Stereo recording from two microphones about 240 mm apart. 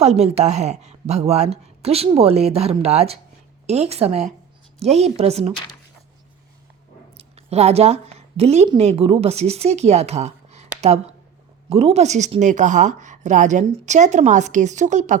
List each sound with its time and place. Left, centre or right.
0.0 s speech: right
7.2 s a woman's voice: right